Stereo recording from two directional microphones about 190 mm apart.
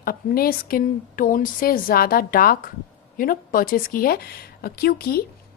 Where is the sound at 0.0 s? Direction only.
50° left (ahead or behind).